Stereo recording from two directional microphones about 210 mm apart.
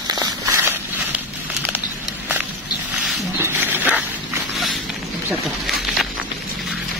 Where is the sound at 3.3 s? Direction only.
10° right (ahead or behind).